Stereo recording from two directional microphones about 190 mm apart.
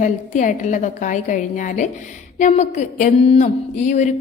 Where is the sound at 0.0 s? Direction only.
40° left (ahead or behind).